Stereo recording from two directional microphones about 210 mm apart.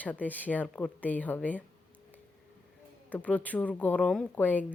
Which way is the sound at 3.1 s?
5° left (ahead or behind).